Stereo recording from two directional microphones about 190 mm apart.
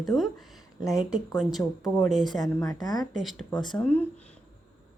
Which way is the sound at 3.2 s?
Centre (ahead or behind).